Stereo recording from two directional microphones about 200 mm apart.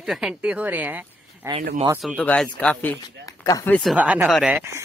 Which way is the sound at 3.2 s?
15° left (ahead or behind).